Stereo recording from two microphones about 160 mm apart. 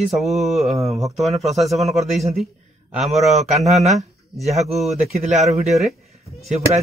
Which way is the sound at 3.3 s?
45° right (ahead or behind).